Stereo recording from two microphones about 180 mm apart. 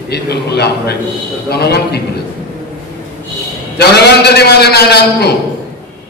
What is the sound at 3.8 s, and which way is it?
A man's voice, 65° left (ahead or behind).